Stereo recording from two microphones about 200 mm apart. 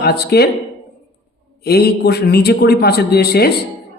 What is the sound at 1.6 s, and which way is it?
A man's voice, 50° left (ahead or behind).